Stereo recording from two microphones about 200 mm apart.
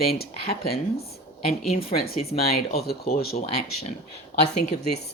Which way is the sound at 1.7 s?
30° left (ahead or behind).